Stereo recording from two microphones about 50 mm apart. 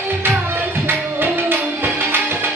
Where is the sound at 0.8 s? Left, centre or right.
Right.